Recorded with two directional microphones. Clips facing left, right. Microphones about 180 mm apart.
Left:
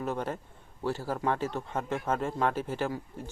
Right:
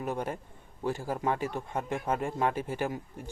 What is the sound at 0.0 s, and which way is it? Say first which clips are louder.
Speech: left 1 dB; 10° right (ahead or behind).